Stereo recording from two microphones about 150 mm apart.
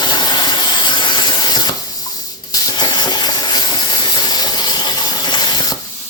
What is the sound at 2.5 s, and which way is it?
Steam, 30° left (ahead or behind).